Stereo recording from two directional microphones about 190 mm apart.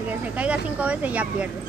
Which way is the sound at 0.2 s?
5° right (ahead or behind).